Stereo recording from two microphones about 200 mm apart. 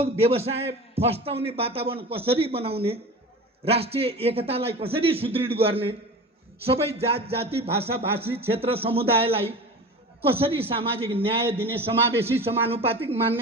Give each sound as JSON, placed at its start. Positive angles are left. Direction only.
{"t": 0.0, "sound": "a man's voice", "side_deg": -30}
{"t": 11.6, "sound": "a man's voice", "side_deg": -10}
{"t": 12.5, "sound": "a man's voice", "side_deg": -30}